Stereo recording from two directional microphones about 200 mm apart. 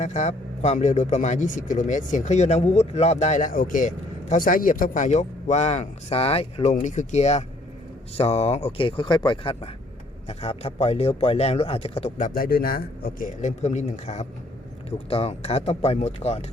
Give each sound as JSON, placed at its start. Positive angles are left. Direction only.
{"t": 0.0, "sound": "speech", "side_deg": 35}